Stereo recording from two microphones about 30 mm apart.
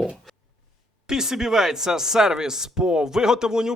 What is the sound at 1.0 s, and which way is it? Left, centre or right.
Speech, centre.